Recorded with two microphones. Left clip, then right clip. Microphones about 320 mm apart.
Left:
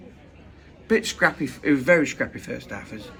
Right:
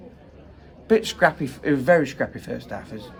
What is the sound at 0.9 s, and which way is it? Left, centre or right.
Speech, centre.